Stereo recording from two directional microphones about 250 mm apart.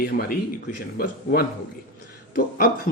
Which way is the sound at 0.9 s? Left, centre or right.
Left.